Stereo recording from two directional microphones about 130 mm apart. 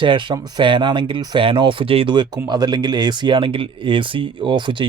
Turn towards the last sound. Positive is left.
turn(degrees=-35)  # may be behind; listen again after turning